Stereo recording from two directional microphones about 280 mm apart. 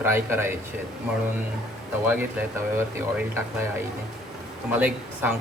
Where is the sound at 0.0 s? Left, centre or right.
Centre.